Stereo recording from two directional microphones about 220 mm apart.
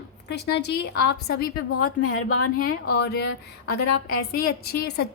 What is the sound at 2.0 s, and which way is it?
Speech, 75° left (ahead or behind).